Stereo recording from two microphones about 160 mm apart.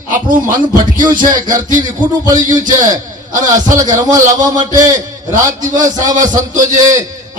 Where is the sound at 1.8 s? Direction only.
25° right (ahead or behind).